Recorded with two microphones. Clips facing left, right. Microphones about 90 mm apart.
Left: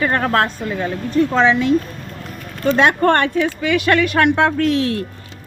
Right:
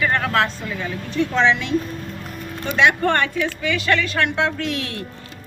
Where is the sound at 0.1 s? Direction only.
45° left (ahead or behind).